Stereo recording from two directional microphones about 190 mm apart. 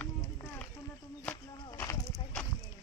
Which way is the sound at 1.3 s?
15° left (ahead or behind).